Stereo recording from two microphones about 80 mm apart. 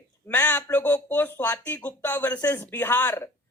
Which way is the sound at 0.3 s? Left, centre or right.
Centre.